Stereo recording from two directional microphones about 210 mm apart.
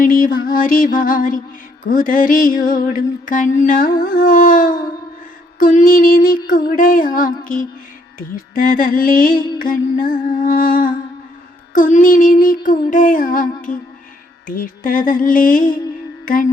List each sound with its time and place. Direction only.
0.0 s music: 40° left (ahead or behind)